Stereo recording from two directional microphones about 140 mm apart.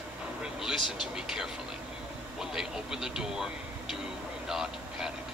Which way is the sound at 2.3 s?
5° right (ahead or behind).